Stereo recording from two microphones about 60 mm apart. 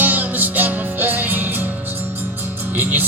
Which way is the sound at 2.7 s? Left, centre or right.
Right.